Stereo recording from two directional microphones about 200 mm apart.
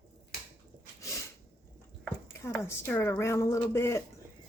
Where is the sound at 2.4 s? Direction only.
10° left (ahead or behind).